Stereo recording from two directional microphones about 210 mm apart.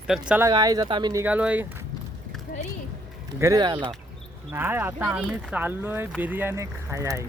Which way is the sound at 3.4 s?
15° right (ahead or behind).